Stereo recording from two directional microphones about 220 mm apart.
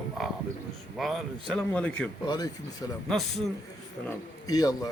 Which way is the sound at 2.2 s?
20° left (ahead or behind).